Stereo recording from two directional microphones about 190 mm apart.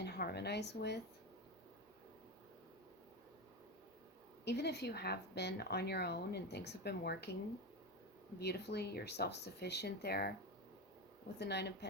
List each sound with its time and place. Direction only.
0.0 s a sound: 60° left (ahead or behind)
4.4 s speech: 60° left (ahead or behind)
8.4 s speech: 60° left (ahead or behind)
11.3 s speech: 60° left (ahead or behind)